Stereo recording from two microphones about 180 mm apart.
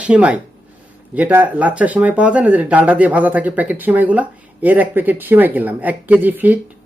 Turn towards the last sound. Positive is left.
turn(degrees=-10)  # may be behind; listen again after turning